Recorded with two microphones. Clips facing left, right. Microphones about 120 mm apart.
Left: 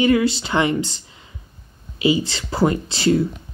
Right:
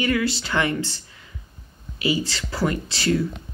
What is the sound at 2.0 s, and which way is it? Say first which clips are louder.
Speech: left 5 dB; 20° left (ahead or behind).